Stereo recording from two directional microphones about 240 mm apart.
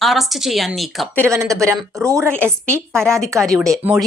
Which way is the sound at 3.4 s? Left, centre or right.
Centre.